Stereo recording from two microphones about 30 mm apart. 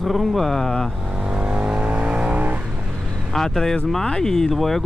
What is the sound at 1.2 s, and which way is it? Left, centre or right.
Vehicle, right.